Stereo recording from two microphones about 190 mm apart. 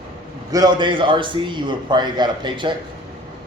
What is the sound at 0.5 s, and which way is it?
A man's voice, 20° right (ahead or behind).